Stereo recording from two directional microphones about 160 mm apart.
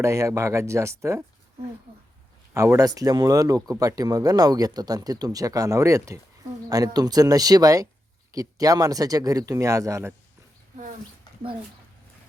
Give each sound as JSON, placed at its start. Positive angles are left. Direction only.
{"t": 0.0, "sound": "speech", "side_deg": -20}
{"t": 2.5, "sound": "speech", "side_deg": -20}